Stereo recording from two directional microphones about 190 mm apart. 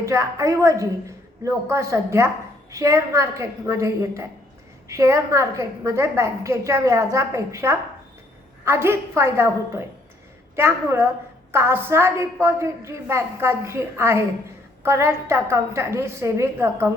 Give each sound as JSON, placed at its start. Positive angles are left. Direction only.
{"t": 0.0, "sound": "a woman's voice", "side_deg": -15}